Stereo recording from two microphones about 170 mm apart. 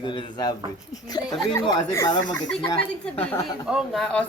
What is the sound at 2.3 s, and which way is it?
Speech, 5° left (ahead or behind).